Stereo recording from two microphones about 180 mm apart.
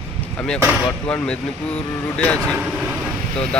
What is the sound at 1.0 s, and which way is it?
Speech, 5° left (ahead or behind).